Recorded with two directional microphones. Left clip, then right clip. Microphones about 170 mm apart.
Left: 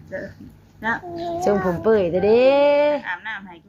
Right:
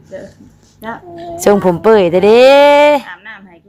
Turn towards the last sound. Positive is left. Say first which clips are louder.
# left 2 dB
turn(degrees=-20)  # may be behind; listen again after turning